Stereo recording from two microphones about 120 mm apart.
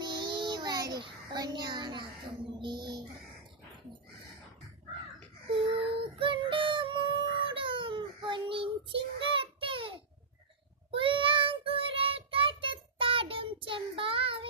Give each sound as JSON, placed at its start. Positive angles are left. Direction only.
{"t": 0.0, "sound": "child singing", "side_deg": -40}
{"t": 2.6, "sound": "speech", "side_deg": -40}
{"t": 5.5, "sound": "music", "side_deg": -45}
{"t": 10.9, "sound": "child singing", "side_deg": -45}